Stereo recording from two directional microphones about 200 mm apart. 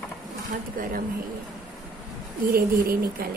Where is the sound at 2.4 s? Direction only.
45° right (ahead or behind).